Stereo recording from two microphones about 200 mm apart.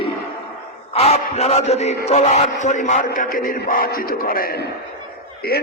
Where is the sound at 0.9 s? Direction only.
30° left (ahead or behind).